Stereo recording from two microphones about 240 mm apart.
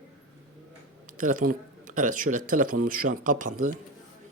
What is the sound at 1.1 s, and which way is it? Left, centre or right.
Speech, right.